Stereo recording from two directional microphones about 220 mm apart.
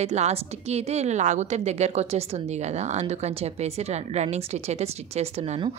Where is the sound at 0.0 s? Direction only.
30° right (ahead or behind).